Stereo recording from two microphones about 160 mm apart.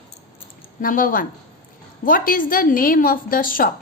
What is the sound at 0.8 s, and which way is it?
A woman's voice, 60° left (ahead or behind).